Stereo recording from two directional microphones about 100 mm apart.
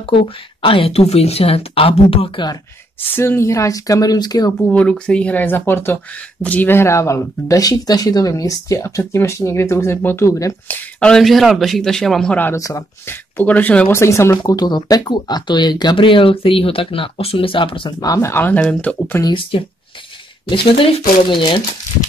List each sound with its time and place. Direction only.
0.0 s speech: 60° left (ahead or behind)
3.1 s speech: 25° left (ahead or behind); by 4.6 s 40° left (ahead or behind)
4.6 s speech: 10° left (ahead or behind); by 10.8 s 30° left (ahead or behind)
11.0 s a man's voice: 5° left (ahead or behind)
12.5 s speech: 35° left (ahead or behind)
13.4 s speech: 15° left (ahead or behind)
14.4 s speech: 45° left (ahead or behind)
18.0 s speech: 30° left (ahead or behind)
18.4 s speech: 15° left (ahead or behind)
19.2 s speech: 25° left (ahead or behind)
20.4 s speech: 60° left (ahead or behind)